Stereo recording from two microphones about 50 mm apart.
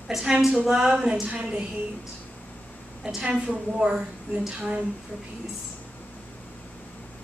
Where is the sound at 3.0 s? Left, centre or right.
Centre.